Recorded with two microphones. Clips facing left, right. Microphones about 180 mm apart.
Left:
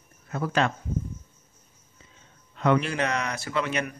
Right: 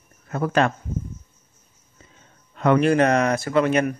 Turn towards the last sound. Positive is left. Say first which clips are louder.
# right 9 dB
turn(degrees=-45)  # may be behind; listen again after turning